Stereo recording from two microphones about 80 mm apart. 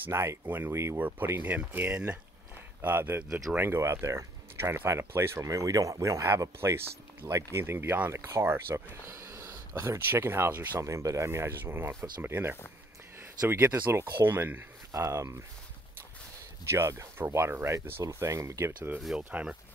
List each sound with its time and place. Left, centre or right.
0.1 s speech: right
0.9 s speech: right
10.8 s speech: right
14.9 s speech: right
16.7 s speech: right
18.9 s speech: centre